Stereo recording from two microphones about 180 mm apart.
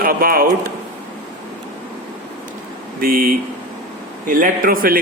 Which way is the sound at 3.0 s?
55° right (ahead or behind).